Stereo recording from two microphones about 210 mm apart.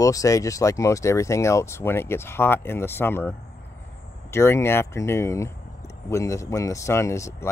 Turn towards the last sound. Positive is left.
turn(degrees=15)  # may be behind; listen again after turning